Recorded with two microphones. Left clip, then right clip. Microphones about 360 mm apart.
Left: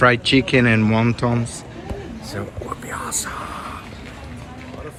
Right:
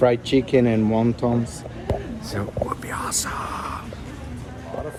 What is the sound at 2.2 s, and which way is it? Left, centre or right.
Speech, centre.